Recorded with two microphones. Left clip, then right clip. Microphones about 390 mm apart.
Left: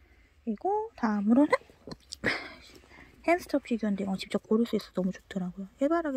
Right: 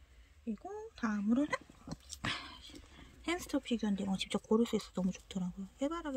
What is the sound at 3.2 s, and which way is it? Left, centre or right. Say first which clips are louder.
Speech: left 10 dB; centre.